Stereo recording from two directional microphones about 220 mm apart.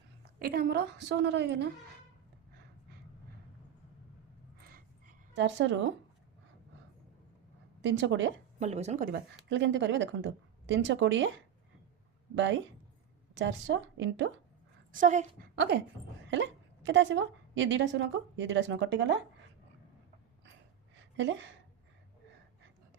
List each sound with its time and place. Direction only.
0.3 s a woman's voice: 40° right (ahead or behind)
5.3 s a woman's voice: 55° right (ahead or behind)
7.8 s a woman's voice: 55° right (ahead or behind)
8.5 s a woman's voice: 30° right (ahead or behind)
9.5 s a woman's voice: 55° right (ahead or behind)
13.3 s a woman's voice: 55° right (ahead or behind)
14.9 s a woman's voice: 35° right (ahead or behind)
15.5 s a woman's voice: 50° right (ahead or behind)
20.9 s a sound: 55° right (ahead or behind)